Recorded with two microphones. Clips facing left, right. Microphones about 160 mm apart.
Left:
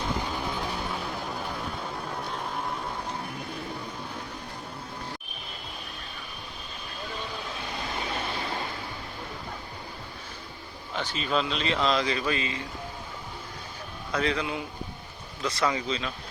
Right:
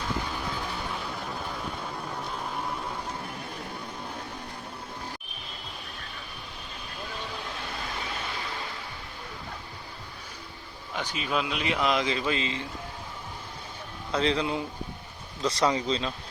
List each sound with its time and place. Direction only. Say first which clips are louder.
2.0 s vehicle: left 1 dB; centre (ahead or behind)
10.9 s speech: left 2 dB; 15° right (ahead or behind)
14.1 s a man's voice: right 2 dB; 30° right (ahead or behind)